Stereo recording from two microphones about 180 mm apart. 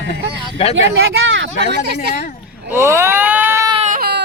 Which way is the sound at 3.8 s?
55° right (ahead or behind).